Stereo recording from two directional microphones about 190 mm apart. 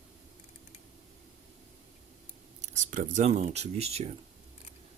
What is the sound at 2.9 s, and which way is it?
Speech, 40° right (ahead or behind).